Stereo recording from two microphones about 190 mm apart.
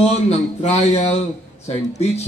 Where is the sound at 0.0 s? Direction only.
35° left (ahead or behind).